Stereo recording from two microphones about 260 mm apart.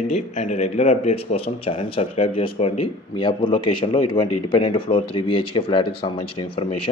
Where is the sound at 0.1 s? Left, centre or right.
Left.